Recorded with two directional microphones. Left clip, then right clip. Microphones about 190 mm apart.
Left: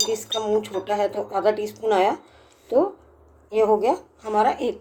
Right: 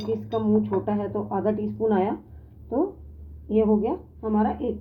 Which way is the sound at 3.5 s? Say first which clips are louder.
Left 4 dB; 15° left (ahead or behind).